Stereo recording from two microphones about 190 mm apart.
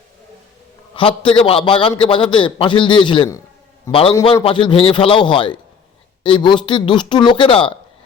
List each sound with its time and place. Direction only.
0.9 s a man's voice: 25° left (ahead or behind)
4.4 s speech: 25° left (ahead or behind)